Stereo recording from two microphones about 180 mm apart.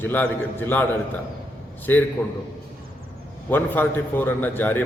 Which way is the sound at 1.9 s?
10° left (ahead or behind).